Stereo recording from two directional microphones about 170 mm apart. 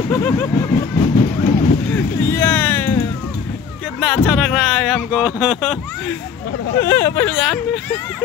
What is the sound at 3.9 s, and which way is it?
Speech, centre (ahead or behind).